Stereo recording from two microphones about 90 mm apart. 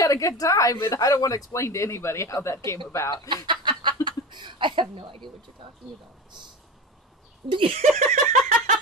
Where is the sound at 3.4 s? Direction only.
60° right (ahead or behind).